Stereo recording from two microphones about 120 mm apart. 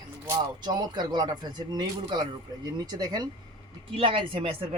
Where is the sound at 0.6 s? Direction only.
35° right (ahead or behind).